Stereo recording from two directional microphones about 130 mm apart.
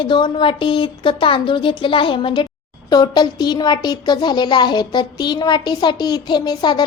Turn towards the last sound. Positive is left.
turn(degrees=35)  # may be behind; listen again after turning